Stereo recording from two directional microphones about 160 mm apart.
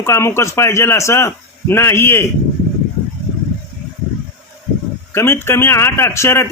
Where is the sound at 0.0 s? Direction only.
15° left (ahead or behind).